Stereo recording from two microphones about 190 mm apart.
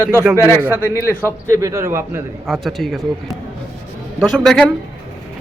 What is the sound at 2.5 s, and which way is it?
Speech, centre (ahead or behind).